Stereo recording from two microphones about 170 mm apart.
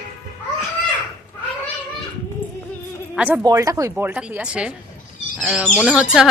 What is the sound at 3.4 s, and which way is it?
A woman's voice, 20° right (ahead or behind).